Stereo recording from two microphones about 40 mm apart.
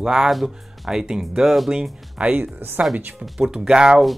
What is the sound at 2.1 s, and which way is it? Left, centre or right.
Speech, right.